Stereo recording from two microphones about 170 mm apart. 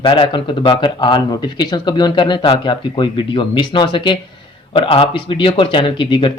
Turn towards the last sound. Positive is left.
turn(degrees=30)  # may be behind; listen again after turning